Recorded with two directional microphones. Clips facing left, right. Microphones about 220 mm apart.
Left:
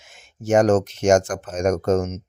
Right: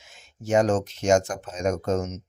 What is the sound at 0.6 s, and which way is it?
Speech, 90° left.